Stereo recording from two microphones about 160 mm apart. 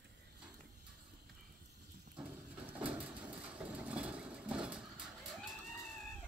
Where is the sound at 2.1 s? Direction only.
5° right (ahead or behind).